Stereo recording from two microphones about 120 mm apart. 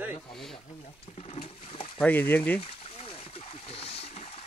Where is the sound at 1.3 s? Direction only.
55° left (ahead or behind).